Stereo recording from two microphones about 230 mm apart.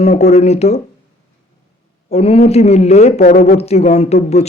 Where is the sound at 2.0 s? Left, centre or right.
Left.